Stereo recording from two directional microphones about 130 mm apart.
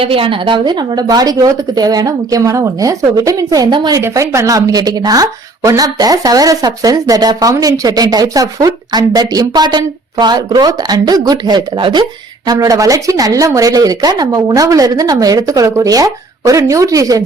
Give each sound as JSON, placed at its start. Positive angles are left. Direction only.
{"t": 0.0, "sound": "a woman's voice", "side_deg": -45}